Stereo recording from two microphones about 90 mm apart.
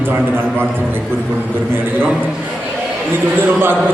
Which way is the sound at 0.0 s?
25° right (ahead or behind).